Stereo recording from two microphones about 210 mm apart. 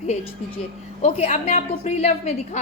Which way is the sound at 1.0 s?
30° left (ahead or behind).